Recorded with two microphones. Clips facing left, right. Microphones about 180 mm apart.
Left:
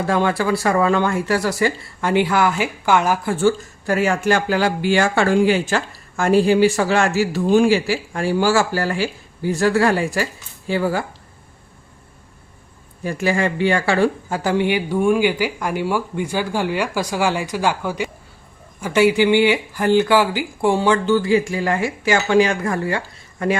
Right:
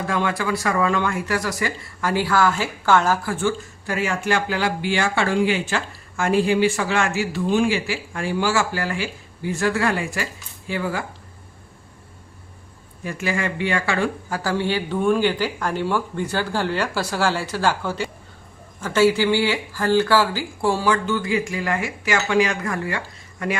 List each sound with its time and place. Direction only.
0.1 s speech: 35° left (ahead or behind); by 3.3 s 15° left (ahead or behind)
3.3 s speech: 40° left (ahead or behind)
13.1 s speech: 35° left (ahead or behind)